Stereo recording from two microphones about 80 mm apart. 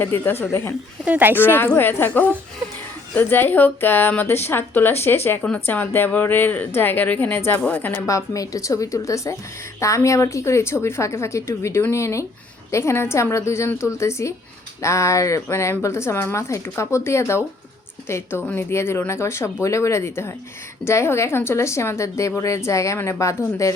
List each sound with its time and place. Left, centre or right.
0.0 s a woman's voice: left
1.0 s speech: right
1.5 s a woman's voice: left
8.0 s speech: left